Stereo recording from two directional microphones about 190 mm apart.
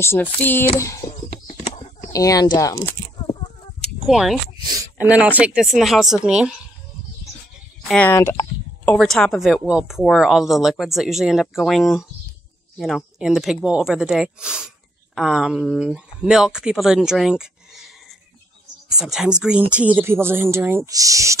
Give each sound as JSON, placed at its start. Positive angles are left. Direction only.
{"t": 0.0, "sound": "speech", "side_deg": 10}
{"t": 1.5, "sound": "a sound", "side_deg": 35}
{"t": 2.1, "sound": "speech", "side_deg": 20}
{"t": 4.0, "sound": "speech", "side_deg": 0}
{"t": 7.9, "sound": "speech", "side_deg": 10}
{"t": 8.8, "sound": "speech", "side_deg": 0}